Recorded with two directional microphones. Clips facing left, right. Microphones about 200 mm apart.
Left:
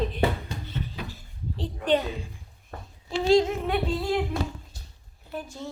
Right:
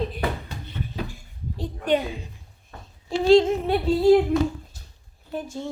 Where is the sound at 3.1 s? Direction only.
30° right (ahead or behind).